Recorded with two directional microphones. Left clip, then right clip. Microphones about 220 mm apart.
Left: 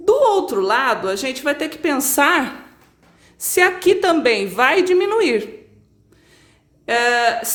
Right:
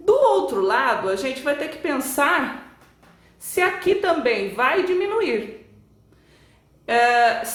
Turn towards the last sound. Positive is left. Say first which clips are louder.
# even
turn(degrees=45)  # may be behind; listen again after turning